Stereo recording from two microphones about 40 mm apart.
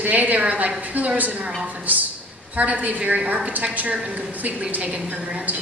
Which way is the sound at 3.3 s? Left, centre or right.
Right.